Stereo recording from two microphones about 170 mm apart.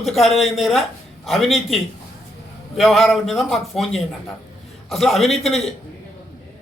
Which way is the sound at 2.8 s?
Centre (ahead or behind).